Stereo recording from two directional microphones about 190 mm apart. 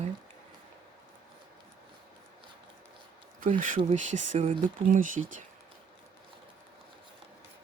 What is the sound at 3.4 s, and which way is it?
Speech, 45° right (ahead or behind).